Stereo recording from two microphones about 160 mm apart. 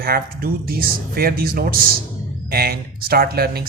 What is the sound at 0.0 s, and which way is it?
Speech, 65° right (ahead or behind).